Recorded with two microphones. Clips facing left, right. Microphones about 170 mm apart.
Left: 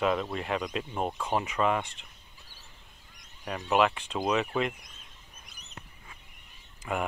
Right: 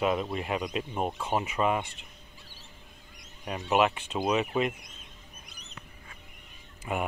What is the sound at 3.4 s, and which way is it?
Speech, 20° right (ahead or behind).